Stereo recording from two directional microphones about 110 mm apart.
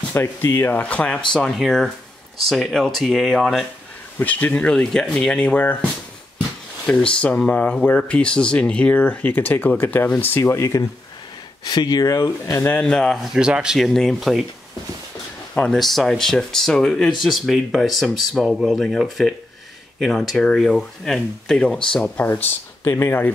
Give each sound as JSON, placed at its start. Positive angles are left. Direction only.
{"t": 0.1, "sound": "speech", "side_deg": 20}
{"t": 4.2, "sound": "speech", "side_deg": 15}
{"t": 7.2, "sound": "speech", "side_deg": 10}
{"t": 12.6, "sound": "speech", "side_deg": 10}
{"t": 15.5, "sound": "speech", "side_deg": 5}